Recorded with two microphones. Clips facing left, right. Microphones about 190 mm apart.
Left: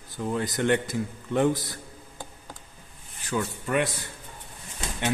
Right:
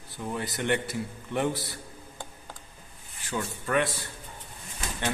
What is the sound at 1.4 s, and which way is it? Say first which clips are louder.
Speech: left 5 dB; 15° left (ahead or behind).